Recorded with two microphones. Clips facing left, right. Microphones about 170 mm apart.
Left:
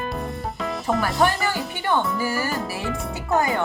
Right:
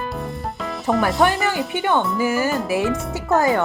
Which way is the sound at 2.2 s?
20° right (ahead or behind).